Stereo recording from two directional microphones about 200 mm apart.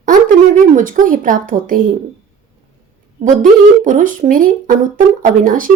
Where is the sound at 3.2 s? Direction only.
40° right (ahead or behind).